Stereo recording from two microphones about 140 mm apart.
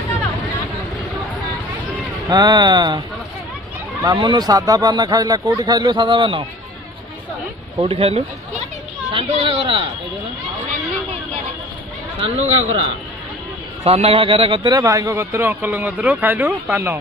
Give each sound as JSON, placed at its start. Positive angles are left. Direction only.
{"t": 2.2, "sound": "speech", "side_deg": -25}
{"t": 4.0, "sound": "a man's voice", "side_deg": -30}
{"t": 7.8, "sound": "a man's voice", "side_deg": -45}
{"t": 12.2, "sound": "a man's voice", "side_deg": -50}